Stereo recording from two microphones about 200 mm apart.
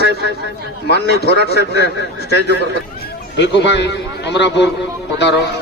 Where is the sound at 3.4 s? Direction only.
60° left (ahead or behind).